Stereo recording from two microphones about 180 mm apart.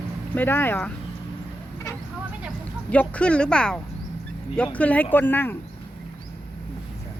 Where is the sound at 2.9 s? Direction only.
5° left (ahead or behind).